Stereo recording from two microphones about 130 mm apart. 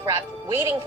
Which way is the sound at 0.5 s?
20° right (ahead or behind).